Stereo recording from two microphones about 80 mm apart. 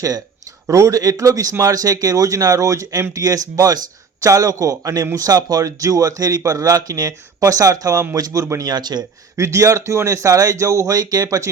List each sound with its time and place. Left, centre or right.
0.7 s speech: right
8.7 s speech: right
9.3 s speech: right